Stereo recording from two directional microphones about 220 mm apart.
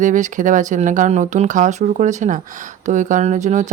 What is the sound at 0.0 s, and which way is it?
Speech, 35° right (ahead or behind).